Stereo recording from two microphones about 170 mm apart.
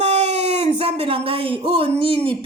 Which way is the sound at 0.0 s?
40° right (ahead or behind).